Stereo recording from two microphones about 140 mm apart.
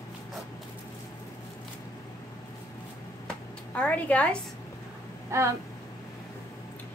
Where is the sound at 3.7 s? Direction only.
10° left (ahead or behind).